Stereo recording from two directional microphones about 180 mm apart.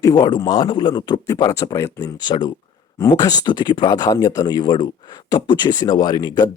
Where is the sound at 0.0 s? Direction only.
20° left (ahead or behind).